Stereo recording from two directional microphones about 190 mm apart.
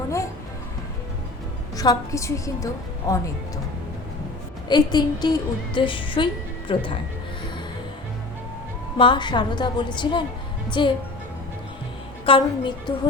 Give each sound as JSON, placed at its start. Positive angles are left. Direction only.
{"t": 1.7, "sound": "a woman's voice", "side_deg": 20}
{"t": 4.7, "sound": "a woman's voice", "side_deg": 20}
{"t": 9.0, "sound": "a woman's voice", "side_deg": 25}
{"t": 12.2, "sound": "a woman's voice", "side_deg": 25}